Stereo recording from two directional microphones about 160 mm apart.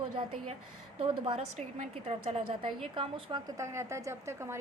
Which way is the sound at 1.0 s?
35° right (ahead or behind).